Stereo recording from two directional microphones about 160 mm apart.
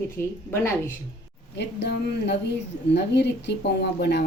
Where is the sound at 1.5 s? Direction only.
90° left.